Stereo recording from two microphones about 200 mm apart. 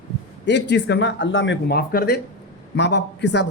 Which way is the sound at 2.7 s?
60° left (ahead or behind).